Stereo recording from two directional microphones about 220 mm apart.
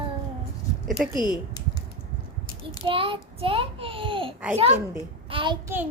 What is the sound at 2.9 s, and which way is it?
A child's voice, 25° right (ahead or behind).